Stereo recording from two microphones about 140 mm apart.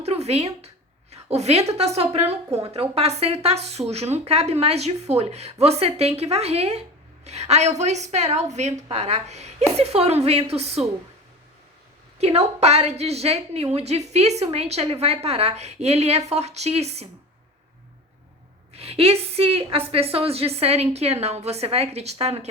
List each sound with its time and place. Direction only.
0.0 s a sound: 50° right (ahead or behind)
1.1 s a woman's voice: 50° right (ahead or behind)
12.2 s a woman's voice: 50° right (ahead or behind)
18.7 s a woman's voice: 45° right (ahead or behind)